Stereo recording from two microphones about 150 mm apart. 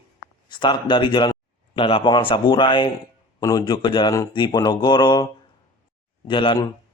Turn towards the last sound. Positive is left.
turn(degrees=35)  # may be behind; listen again after turning